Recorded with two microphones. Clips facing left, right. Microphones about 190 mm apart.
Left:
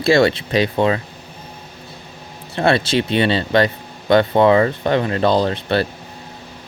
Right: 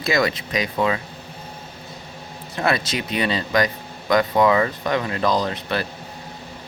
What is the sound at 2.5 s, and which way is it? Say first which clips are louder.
Speech: left 6 dB; 30° left (ahead or behind).